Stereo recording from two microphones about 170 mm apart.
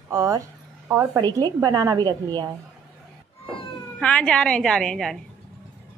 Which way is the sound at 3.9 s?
5° left (ahead or behind).